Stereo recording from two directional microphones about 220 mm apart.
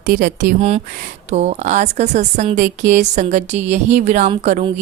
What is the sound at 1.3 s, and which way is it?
Speech, 30° right (ahead or behind).